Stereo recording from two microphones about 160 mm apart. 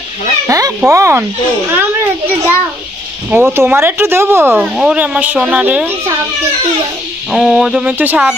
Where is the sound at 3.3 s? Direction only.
15° right (ahead or behind).